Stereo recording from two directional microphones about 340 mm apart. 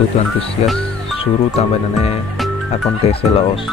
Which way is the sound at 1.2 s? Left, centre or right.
Centre.